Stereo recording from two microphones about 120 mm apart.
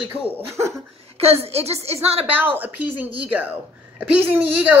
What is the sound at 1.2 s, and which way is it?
Speech, 60° right (ahead or behind).